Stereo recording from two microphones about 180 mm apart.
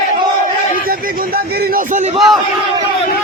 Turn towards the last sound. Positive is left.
turn(degrees=0)  # may be behind; listen again after turning